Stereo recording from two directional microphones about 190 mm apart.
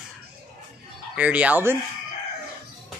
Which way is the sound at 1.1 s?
5° right (ahead or behind).